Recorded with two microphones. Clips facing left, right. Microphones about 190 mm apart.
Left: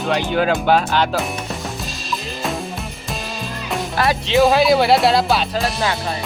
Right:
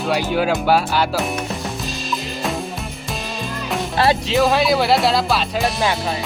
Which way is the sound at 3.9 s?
30° right (ahead or behind).